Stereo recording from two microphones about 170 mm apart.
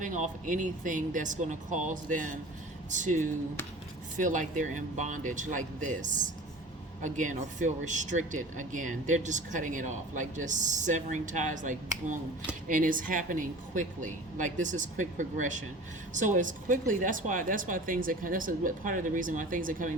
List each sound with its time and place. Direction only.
0.0 s speech: 50° right (ahead or behind)